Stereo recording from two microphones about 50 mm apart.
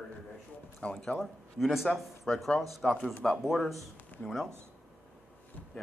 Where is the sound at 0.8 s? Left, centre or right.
Left.